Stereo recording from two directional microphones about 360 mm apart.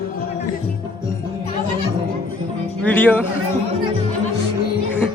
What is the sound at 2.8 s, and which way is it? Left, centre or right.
Speech, centre.